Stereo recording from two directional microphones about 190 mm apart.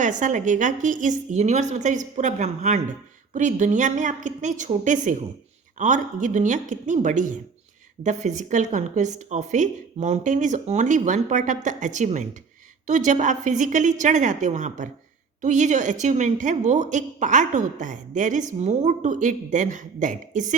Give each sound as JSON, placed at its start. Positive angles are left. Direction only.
{"t": 0.0, "sound": "a woman's voice", "side_deg": -40}